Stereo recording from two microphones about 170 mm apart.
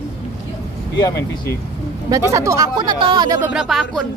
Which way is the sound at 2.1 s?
20° right (ahead or behind).